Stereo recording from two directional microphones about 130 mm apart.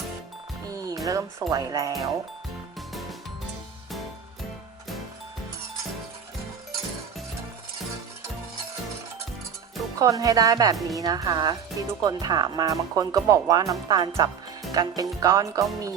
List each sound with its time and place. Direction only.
0.7 s music: 25° right (ahead or behind)
1.0 s speech: 25° right (ahead or behind)
10.0 s speech: 25° right (ahead or behind)